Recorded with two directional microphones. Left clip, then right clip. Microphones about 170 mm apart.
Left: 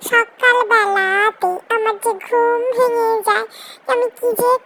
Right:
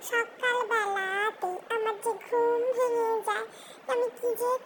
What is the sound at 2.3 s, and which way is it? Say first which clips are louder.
Child singing: left 10 dB; 55° left (ahead or behind).